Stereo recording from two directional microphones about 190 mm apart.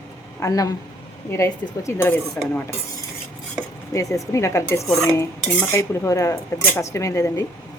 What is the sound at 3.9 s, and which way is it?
Speech, 15° left (ahead or behind).